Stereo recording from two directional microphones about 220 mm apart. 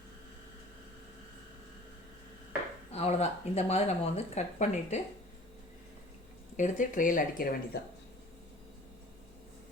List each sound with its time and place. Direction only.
2.9 s speech: 30° left (ahead or behind)
6.6 s speech: 35° left (ahead or behind)